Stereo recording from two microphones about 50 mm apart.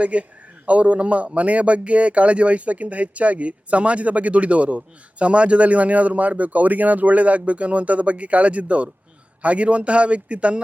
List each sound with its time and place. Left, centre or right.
0.0 s a man's voice: right